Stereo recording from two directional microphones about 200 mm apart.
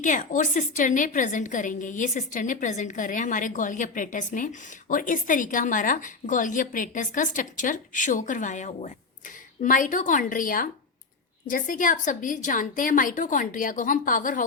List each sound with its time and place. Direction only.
0.0 s a woman's voice: 40° left (ahead or behind)